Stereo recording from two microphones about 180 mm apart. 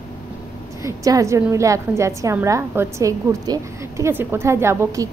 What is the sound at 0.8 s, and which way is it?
A woman's voice, 15° right (ahead or behind).